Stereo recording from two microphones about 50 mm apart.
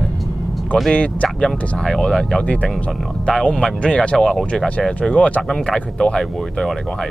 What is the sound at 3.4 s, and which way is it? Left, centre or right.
Speech, centre.